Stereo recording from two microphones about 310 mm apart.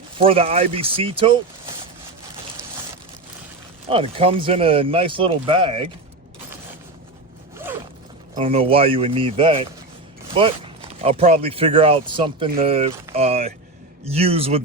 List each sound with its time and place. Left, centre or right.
0.2 s speech: centre
3.8 s speech: centre
8.4 s speech: centre
11.0 s a man's voice: centre